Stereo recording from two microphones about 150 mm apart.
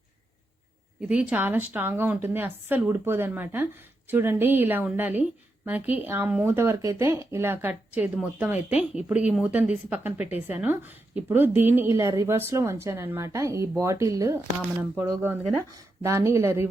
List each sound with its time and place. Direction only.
1.0 s speech: 10° right (ahead or behind)